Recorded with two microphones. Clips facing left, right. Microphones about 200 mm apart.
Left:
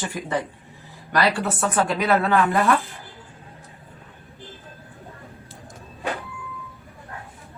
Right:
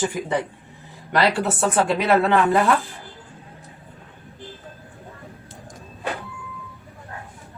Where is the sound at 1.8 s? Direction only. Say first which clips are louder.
Right 2 dB; 25° right (ahead or behind).